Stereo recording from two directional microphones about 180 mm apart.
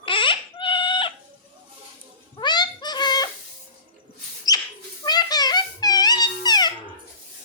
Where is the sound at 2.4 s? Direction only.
25° left (ahead or behind).